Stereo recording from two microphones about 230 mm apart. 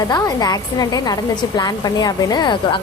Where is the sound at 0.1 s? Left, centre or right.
Centre.